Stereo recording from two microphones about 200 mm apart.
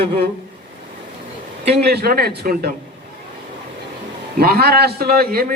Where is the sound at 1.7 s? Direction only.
55° right (ahead or behind).